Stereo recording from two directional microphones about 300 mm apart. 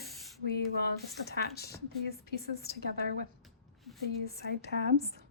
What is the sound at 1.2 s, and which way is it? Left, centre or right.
A woman's voice, left.